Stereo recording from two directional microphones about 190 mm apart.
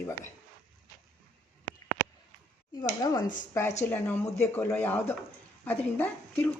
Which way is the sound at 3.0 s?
15° left (ahead or behind).